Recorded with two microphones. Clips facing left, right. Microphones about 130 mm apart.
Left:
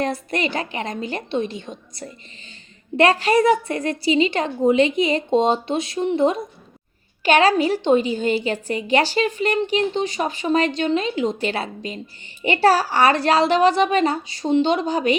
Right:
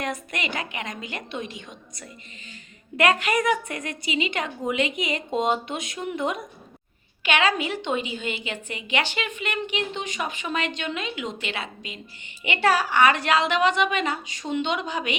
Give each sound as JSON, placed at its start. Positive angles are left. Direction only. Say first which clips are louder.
{"t": 0.0, "sound": "a woman's voice", "louder": "left 7 dB", "side_deg": 35}